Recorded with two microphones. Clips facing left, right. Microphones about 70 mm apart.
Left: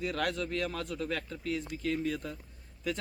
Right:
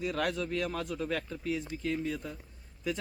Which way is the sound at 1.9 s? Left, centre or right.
Centre.